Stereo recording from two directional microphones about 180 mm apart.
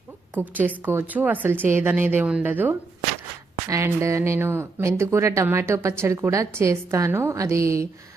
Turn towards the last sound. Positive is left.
turn(degrees=-15)  # may be behind; listen again after turning